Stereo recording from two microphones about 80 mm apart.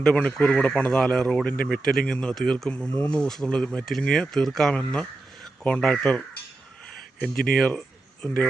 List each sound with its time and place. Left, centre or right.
0.1 s speech: centre
4.8 s speech: centre